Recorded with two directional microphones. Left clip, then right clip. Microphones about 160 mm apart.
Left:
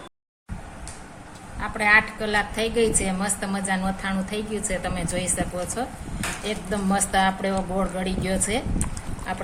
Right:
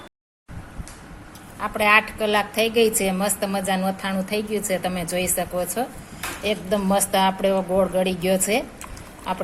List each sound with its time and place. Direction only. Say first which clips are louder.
1.6 s a woman's voice: right 1 dB; 45° right (ahead or behind)